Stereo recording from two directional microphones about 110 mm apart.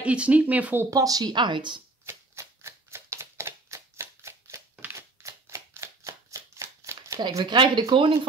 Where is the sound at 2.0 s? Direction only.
25° right (ahead or behind).